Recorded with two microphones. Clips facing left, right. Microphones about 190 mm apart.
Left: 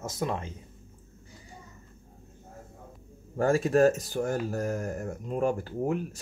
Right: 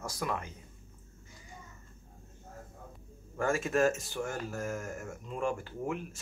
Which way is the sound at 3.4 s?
35° left (ahead or behind).